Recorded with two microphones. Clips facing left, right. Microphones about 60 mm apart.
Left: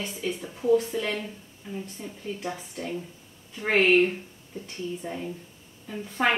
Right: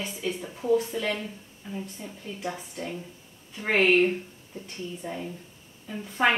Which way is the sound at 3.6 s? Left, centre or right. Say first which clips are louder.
Left 1 dB; centre.